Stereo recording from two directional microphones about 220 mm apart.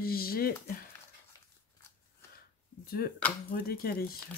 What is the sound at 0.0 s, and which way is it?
Speech, 45° left (ahead or behind).